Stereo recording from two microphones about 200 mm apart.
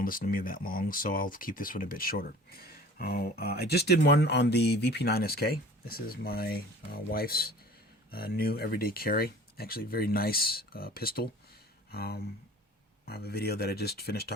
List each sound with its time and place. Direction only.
0.0 s speech: 45° left (ahead or behind)